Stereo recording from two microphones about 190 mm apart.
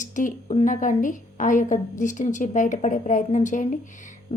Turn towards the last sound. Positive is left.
turn(degrees=40)  # may be behind; listen again after turning